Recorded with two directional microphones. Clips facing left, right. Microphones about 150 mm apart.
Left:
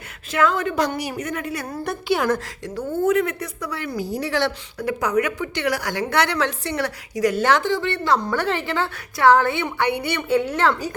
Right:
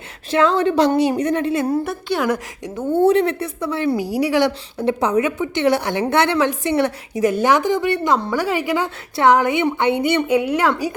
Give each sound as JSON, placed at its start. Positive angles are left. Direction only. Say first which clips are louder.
{"t": 0.3, "sound": "a woman's voice", "louder": "right 5 dB", "side_deg": -30}
{"t": 1.8, "sound": "a woman's voice", "louder": "right 1 dB", "side_deg": 0}
{"t": 3.1, "sound": "a woman's voice", "louder": "right 4 dB", "side_deg": -30}
{"t": 4.0, "sound": "a woman's voice", "louder": "right 2 dB", "side_deg": -10}
{"t": 4.8, "sound": "a woman's voice", "louder": "right 4 dB", "side_deg": -25}